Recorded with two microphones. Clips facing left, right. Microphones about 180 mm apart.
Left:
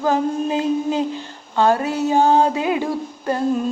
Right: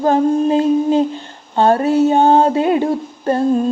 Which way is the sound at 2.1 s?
55° right (ahead or behind).